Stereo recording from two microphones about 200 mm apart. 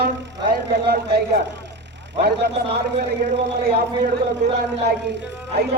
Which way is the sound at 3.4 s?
50° right (ahead or behind).